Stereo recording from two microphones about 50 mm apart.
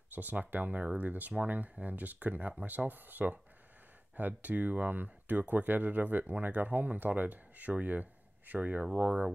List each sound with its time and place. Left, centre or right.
0.1 s speech: right